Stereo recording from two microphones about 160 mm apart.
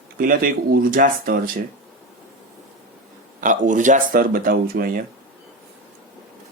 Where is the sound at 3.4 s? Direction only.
55° right (ahead or behind).